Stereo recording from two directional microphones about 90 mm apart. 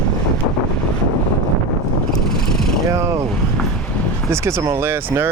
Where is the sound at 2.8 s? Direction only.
35° right (ahead or behind).